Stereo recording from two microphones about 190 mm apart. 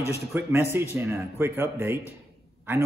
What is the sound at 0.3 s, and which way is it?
Speech, 10° right (ahead or behind).